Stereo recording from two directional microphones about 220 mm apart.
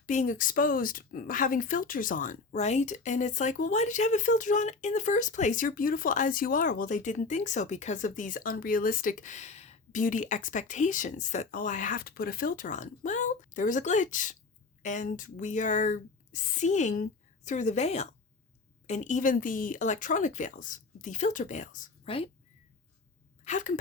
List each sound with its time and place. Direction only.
0.0 s speech: 35° left (ahead or behind)
23.5 s speech: 35° left (ahead or behind)